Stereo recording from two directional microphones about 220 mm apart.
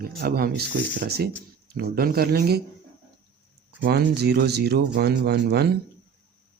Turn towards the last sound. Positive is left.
turn(degrees=-45)  # may be behind; listen again after turning